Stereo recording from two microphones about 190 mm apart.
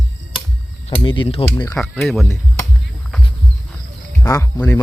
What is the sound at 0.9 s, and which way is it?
Speech, 25° left (ahead or behind).